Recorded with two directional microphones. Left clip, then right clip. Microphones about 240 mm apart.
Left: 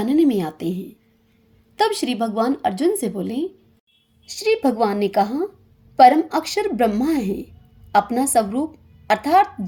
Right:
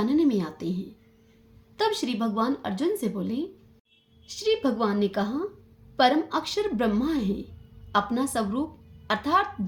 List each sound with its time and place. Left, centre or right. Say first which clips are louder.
0.0 s speech: left 6 dB; left
1.7 s a woman's voice: left 6 dB; left